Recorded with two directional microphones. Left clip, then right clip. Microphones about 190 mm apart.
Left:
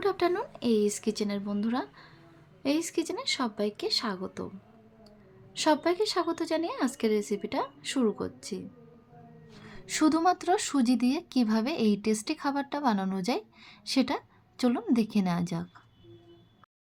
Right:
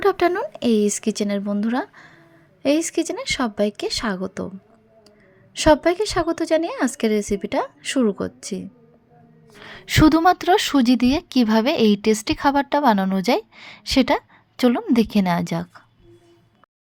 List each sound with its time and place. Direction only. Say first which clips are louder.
0.0 s a woman's voice: right 9 dB; 40° right (ahead or behind)
5.5 s a woman's voice: right 9 dB; 35° right (ahead or behind)